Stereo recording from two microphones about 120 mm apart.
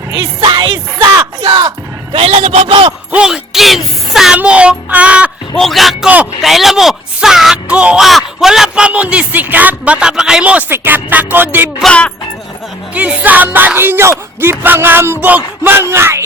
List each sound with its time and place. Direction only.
0.3 s music: 40° right (ahead or behind)
1.5 s speech: 35° right (ahead or behind)
2.1 s a man's voice: 55° right (ahead or behind)
3.1 s speech: 5° right (ahead or behind)
5.5 s speech: centre (ahead or behind); by 11.7 s 15° right (ahead or behind)
11.8 s music: 10° left (ahead or behind)
12.9 s speech: 10° right (ahead or behind)
14.6 s a sound: 15° right (ahead or behind)